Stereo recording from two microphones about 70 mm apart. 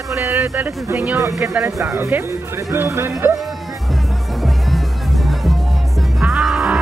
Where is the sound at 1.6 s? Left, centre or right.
Right.